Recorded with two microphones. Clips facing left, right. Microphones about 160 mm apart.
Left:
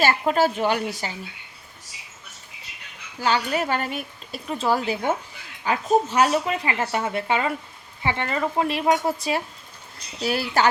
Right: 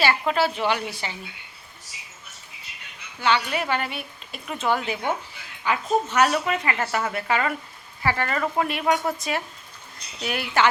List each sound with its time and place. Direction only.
0.0 s a woman's voice: 45° left (ahead or behind)
3.2 s a woman's voice: 40° left (ahead or behind)